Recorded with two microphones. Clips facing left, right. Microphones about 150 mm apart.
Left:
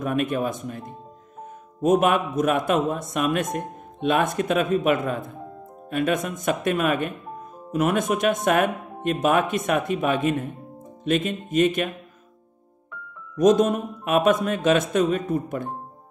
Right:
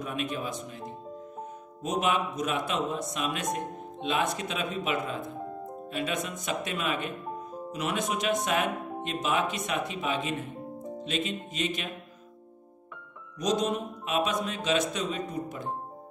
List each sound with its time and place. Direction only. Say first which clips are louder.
0.0 s speech: left 9 dB; 50° left (ahead or behind)
13.4 s speech: left 10 dB; 50° left (ahead or behind)